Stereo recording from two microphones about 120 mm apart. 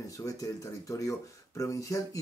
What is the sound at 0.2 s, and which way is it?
Speech, 30° left (ahead or behind).